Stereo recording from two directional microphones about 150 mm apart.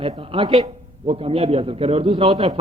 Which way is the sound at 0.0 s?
40° right (ahead or behind).